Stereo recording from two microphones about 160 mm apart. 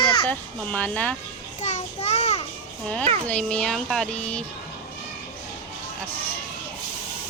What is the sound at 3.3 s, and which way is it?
Speech, 10° left (ahead or behind).